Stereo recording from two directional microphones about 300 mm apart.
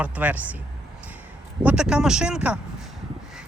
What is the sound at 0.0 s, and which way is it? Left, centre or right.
Speech, centre.